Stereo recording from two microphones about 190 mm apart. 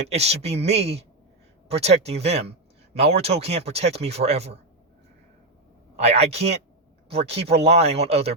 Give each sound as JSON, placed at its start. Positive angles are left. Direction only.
{"t": 0.1, "sound": "speech", "side_deg": -35}
{"t": 6.0, "sound": "speech", "side_deg": -35}